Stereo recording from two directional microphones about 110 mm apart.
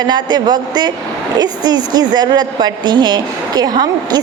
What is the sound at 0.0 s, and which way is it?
A woman's voice, 40° right (ahead or behind).